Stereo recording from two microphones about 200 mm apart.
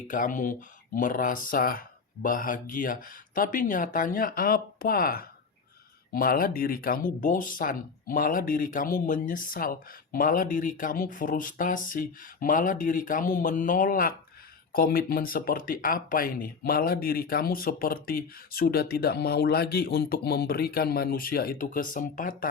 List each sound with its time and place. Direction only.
0.1 s speech: 40° left (ahead or behind)